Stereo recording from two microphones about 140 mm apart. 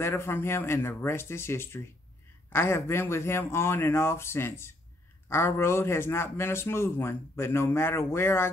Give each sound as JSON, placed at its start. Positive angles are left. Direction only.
{"t": 0.0, "sound": "a man's voice", "side_deg": 15}